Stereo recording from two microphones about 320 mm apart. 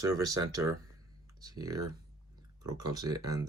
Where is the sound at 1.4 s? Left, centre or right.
Centre.